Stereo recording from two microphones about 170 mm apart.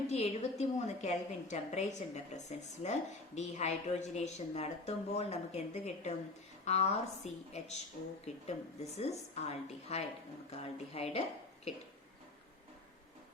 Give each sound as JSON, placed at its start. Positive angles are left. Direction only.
{"t": 0.1, "sound": "a woman's voice", "side_deg": 40}